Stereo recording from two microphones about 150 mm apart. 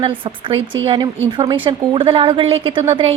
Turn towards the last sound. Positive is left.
turn(degrees=-35)  # may be behind; listen again after turning